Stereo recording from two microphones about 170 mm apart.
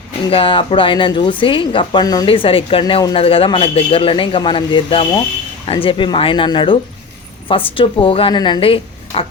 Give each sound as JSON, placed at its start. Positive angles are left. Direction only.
{"t": 0.3, "sound": "a woman's voice", "side_deg": 30}